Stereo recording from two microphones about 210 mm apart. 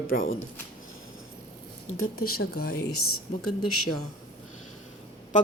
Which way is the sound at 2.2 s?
45° left (ahead or behind).